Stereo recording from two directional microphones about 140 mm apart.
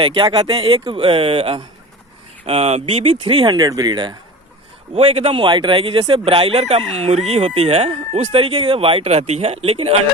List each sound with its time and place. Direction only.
0.0 s speech: 30° right (ahead or behind)
4.9 s speech: 45° right (ahead or behind)